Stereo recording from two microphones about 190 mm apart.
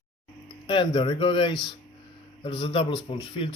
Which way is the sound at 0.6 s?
25° left (ahead or behind).